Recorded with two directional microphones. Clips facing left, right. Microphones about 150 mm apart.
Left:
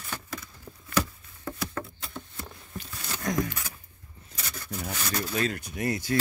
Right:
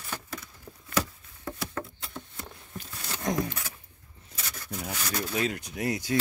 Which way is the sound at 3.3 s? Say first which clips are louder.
Left 1 dB; 30° right (ahead or behind).